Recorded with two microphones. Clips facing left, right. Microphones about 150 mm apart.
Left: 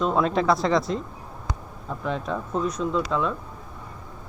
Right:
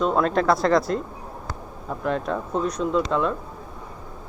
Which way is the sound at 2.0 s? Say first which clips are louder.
Right 3 dB; centre (ahead or behind).